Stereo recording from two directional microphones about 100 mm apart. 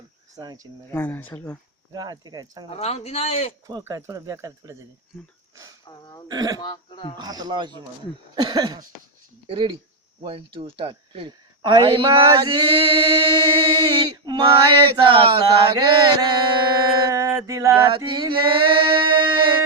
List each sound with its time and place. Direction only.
0.3 s mantra: 35° right (ahead or behind)
0.9 s speech: 20° left (ahead or behind)
1.9 s mantra: 40° right (ahead or behind)
2.6 s speech: 90° left
3.8 s mantra: 30° right (ahead or behind)
5.9 s a sound: 45° left (ahead or behind)
6.2 s mantra: 40° right (ahead or behind)
6.6 s speech: 50° left (ahead or behind)
7.2 s speech: 40° right (ahead or behind)
9.5 s speech: 65° right (ahead or behind)
15.8 s mantra: 50° right (ahead or behind); by 17.7 s 30° right (ahead or behind)
17.9 s male singing: 55° right (ahead or behind)